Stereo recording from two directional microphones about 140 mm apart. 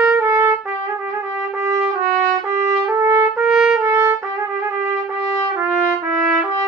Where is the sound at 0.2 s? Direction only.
20° right (ahead or behind).